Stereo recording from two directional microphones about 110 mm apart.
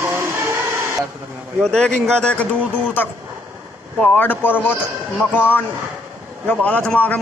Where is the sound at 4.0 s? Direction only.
15° left (ahead or behind).